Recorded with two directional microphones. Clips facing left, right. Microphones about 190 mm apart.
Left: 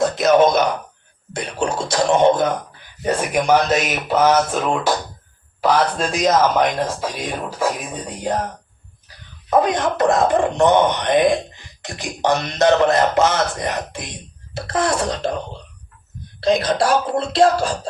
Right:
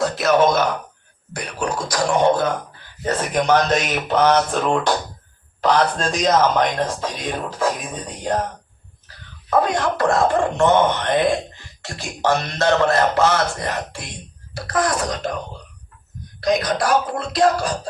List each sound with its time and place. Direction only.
0.0 s a sound: 20° left (ahead or behind)
1.3 s speech: 25° left (ahead or behind); by 7.1 s 10° left (ahead or behind)
9.0 s speech: 20° left (ahead or behind)
16.4 s speech: 30° left (ahead or behind)